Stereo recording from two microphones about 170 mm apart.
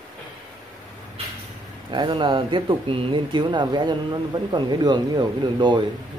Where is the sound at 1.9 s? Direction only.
30° right (ahead or behind).